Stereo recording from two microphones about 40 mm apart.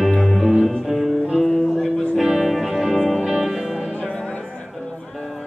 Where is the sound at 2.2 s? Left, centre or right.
Centre.